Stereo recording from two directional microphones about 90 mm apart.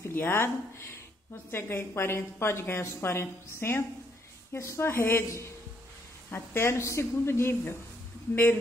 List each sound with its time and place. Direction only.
0.0 s speech: 25° left (ahead or behind)
1.5 s a woman's voice: 25° left (ahead or behind)